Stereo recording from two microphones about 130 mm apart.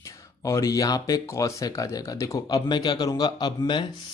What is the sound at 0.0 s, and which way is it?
Speech, 25° left (ahead or behind).